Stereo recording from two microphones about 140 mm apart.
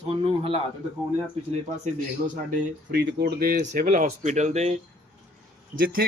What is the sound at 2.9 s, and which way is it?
Speech, 90° right.